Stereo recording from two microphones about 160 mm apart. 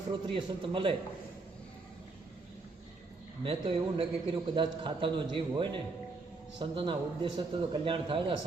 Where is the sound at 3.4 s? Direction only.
35° right (ahead or behind).